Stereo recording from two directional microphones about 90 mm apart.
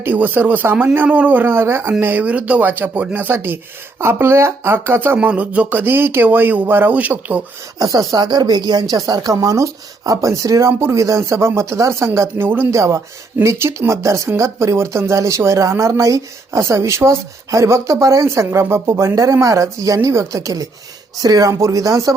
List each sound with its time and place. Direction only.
0.0 s speech: 20° right (ahead or behind)
7.8 s speech: 50° right (ahead or behind); by 12.6 s 25° right (ahead or behind)
12.7 s speech: 35° right (ahead or behind)